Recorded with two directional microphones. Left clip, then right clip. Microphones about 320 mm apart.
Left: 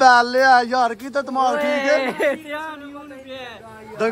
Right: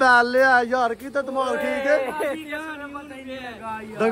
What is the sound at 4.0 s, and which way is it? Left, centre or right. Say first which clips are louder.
Speech: left 1 dB; centre.